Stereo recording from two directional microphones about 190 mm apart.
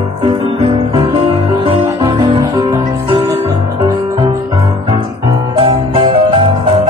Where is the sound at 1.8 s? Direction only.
15° right (ahead or behind).